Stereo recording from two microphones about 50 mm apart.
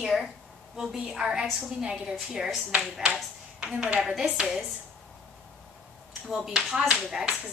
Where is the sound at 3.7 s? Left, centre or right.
Right.